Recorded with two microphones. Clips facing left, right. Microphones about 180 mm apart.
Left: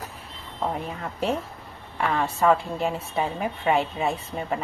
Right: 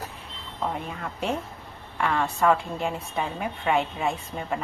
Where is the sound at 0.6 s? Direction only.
5° left (ahead or behind).